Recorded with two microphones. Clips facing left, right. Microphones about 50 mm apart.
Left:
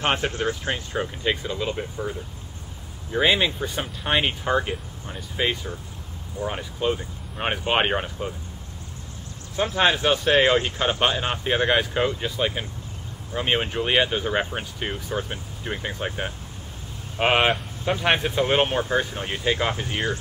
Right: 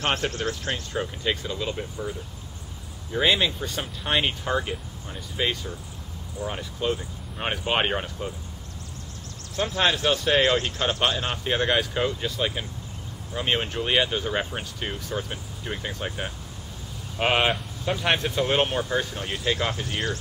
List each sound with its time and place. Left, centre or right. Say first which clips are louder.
0.0 s speech: left 2 dB; centre
9.8 s speech: left 3 dB; centre